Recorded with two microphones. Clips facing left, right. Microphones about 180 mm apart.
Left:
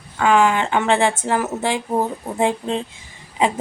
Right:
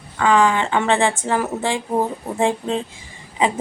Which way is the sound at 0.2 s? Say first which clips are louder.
Even; 10° left (ahead or behind).